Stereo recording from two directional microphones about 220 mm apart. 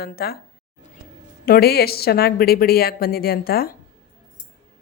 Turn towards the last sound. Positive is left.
turn(degrees=40)  # may be behind; listen again after turning